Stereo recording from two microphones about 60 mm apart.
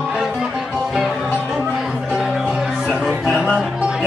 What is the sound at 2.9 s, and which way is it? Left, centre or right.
Music, centre.